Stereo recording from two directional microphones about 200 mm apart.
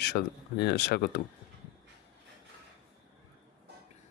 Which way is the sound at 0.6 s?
60° left (ahead or behind).